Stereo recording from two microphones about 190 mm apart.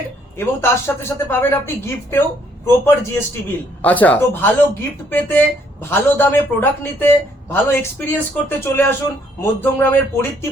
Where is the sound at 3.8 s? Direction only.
10° left (ahead or behind).